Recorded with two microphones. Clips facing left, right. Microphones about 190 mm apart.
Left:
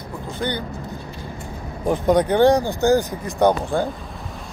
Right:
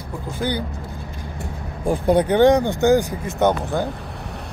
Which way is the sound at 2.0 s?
15° left (ahead or behind).